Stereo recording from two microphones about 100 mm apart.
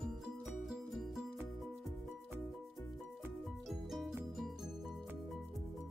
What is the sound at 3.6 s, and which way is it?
Music, centre (ahead or behind).